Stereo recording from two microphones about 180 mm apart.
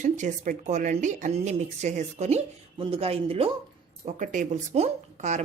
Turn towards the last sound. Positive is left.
turn(degrees=-40)  # may be behind; listen again after turning